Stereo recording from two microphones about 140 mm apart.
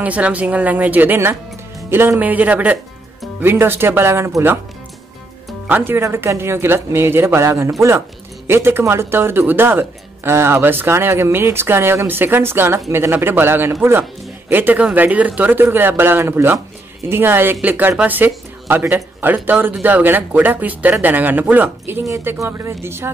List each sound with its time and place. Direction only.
0.0 s speech: 10° right (ahead or behind)
5.7 s speech: 15° right (ahead or behind)